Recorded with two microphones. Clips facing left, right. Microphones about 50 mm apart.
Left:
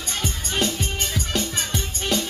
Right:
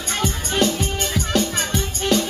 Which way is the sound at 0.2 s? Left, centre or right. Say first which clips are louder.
Right 5 dB; right.